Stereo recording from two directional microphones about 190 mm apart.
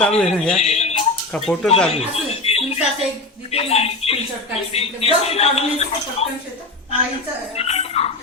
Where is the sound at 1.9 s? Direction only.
35° left (ahead or behind).